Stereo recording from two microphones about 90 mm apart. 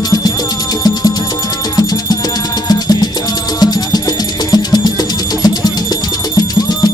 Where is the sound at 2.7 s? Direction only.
50° left (ahead or behind).